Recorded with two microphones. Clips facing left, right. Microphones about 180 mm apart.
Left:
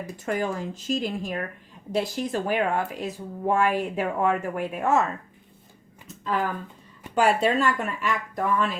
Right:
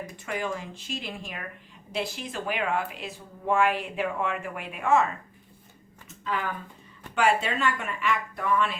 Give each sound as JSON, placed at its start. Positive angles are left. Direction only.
{"t": 0.3, "sound": "speech", "side_deg": 45}
{"t": 6.2, "sound": "speech", "side_deg": 40}